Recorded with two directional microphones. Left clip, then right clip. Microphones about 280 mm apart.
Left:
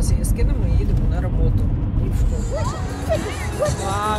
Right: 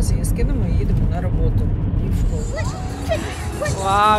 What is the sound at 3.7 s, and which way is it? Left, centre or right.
Speech, centre.